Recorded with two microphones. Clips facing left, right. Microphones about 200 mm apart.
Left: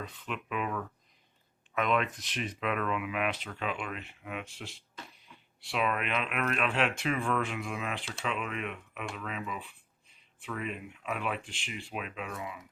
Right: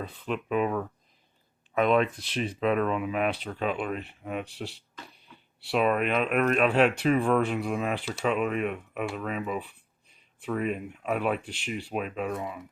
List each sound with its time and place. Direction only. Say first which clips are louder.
0.0 s speech: right 7 dB; 35° right (ahead or behind)